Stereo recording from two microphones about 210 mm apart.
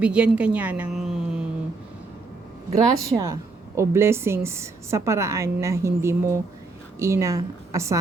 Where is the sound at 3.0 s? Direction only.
15° right (ahead or behind).